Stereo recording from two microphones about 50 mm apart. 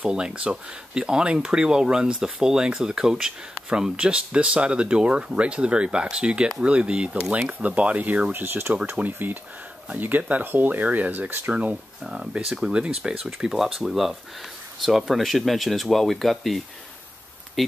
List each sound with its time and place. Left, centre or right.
0.0 s speech: centre
8.3 s speech: right
12.0 s speech: centre